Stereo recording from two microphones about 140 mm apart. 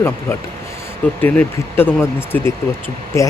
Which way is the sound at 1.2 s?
15° left (ahead or behind).